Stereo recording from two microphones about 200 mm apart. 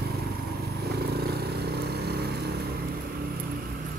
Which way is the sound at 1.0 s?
50° right (ahead or behind).